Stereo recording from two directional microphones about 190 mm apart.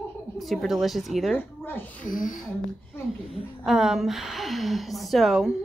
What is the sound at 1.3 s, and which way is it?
Speech, 10° left (ahead or behind).